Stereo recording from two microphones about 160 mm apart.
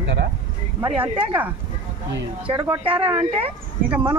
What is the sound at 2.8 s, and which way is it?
Speech, 35° right (ahead or behind).